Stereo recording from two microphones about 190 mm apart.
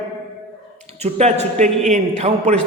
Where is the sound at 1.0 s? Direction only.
35° right (ahead or behind).